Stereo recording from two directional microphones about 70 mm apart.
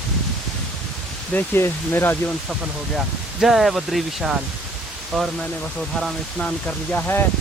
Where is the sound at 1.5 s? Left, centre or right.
Left.